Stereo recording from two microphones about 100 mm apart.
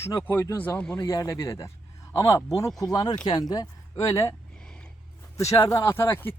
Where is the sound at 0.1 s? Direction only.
30° left (ahead or behind).